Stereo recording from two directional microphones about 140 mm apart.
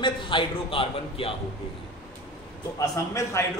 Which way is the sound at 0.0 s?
35° left (ahead or behind).